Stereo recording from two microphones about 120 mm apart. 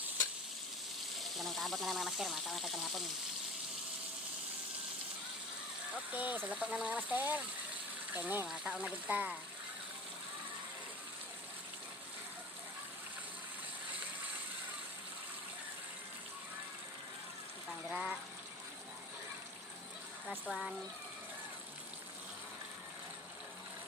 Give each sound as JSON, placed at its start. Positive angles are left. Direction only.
{"t": 1.2, "sound": "speech", "side_deg": 0}
{"t": 5.9, "sound": "speech", "side_deg": -15}
{"t": 8.4, "sound": "speech", "side_deg": -5}
{"t": 17.7, "sound": "a sound", "side_deg": 0}